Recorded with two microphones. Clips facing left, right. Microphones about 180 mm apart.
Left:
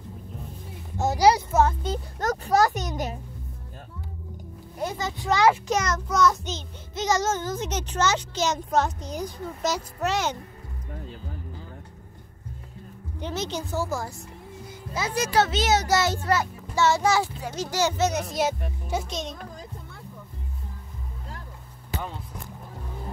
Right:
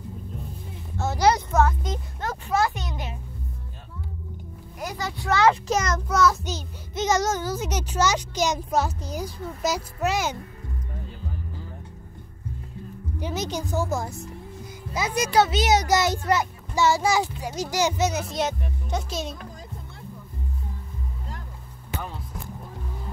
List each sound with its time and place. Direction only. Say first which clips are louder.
0.9 s a sound: left 2 dB; 15° left (ahead or behind)
1.5 s speech: even; 25° left (ahead or behind)
4.7 s speech: left 2 dB; 25° left (ahead or behind)
5.7 s a child's voice: right 1 dB; 10° right (ahead or behind)
7.0 s a child's voice: right 1 dB; 20° right (ahead or behind)
13.2 s a child's voice: right 1 dB; 10° right (ahead or behind); by 19.0 s 5° left (ahead or behind)
19.0 s a child's voice: right 2 dB; 5° right (ahead or behind)